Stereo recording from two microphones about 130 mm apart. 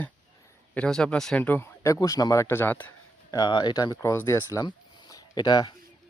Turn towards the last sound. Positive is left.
turn(degrees=35)  # may be behind; listen again after turning